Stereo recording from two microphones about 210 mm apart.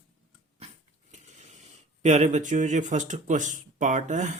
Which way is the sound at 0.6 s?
30° right (ahead or behind).